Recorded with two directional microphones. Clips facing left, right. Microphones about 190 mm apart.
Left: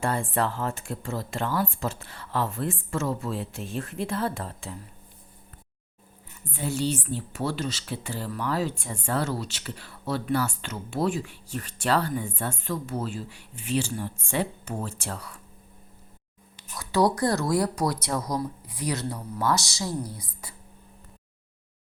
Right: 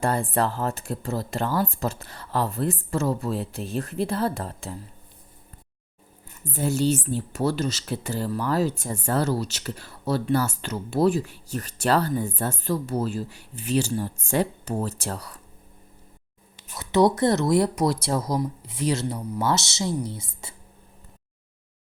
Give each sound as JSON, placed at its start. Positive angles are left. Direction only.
{"t": 0.0, "sound": "speech", "side_deg": -40}
{"t": 6.4, "sound": "speech", "side_deg": -40}
{"t": 16.7, "sound": "speech", "side_deg": -20}